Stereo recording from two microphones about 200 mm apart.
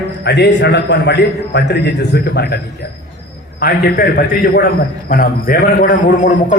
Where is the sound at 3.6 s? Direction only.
50° left (ahead or behind).